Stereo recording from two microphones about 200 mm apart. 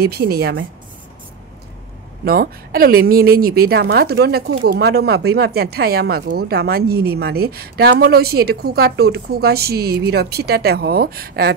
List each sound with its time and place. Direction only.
0.0 s a woman's voice: 50° right (ahead or behind)
2.2 s a woman's voice: 50° right (ahead or behind)